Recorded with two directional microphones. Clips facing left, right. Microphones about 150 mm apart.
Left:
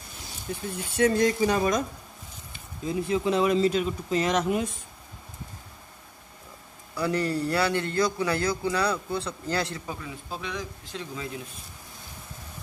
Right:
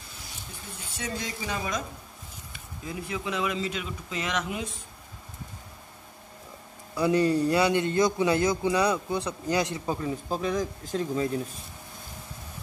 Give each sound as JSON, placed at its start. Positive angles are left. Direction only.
{"t": 0.5, "sound": "speech", "side_deg": 60}
{"t": 2.5, "sound": "speech", "side_deg": 30}
{"t": 7.0, "sound": "a man's voice", "side_deg": -20}
{"t": 9.8, "sound": "speech", "side_deg": -35}